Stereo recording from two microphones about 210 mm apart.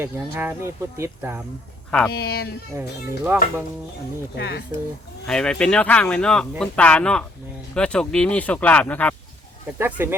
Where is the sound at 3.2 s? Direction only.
10° right (ahead or behind).